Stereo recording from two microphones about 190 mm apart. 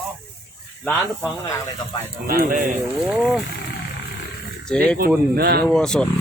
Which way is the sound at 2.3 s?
50° right (ahead or behind).